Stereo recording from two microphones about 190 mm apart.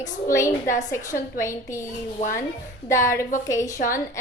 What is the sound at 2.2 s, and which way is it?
Speech, 45° left (ahead or behind).